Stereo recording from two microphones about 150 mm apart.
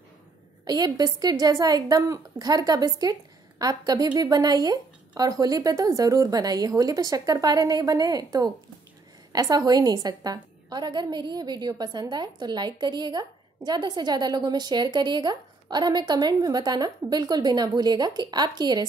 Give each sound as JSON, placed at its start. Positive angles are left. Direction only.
{"t": 0.7, "sound": "a woman's voice", "side_deg": -25}